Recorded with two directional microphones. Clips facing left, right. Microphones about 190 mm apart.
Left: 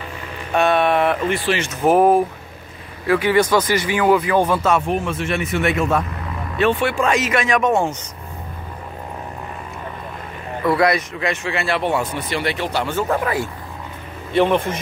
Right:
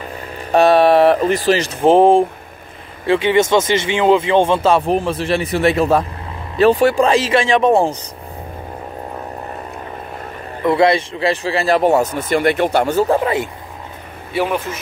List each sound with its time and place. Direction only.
0.5 s speech: 35° right (ahead or behind)
10.6 s speech: 25° right (ahead or behind); by 13.0 s 45° right (ahead or behind)
13.1 s speech: 25° right (ahead or behind)
14.3 s speech: 5° right (ahead or behind)